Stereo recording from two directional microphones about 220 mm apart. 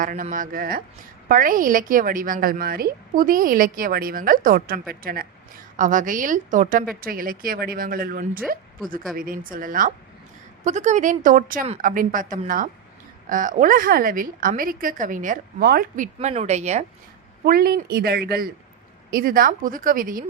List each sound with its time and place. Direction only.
0.0 s a woman's voice: 35° right (ahead or behind)
16.1 s a woman's voice: 30° right (ahead or behind)
17.4 s a woman's voice: 45° right (ahead or behind)